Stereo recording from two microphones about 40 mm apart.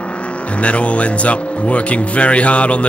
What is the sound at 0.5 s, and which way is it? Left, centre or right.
Speech, left.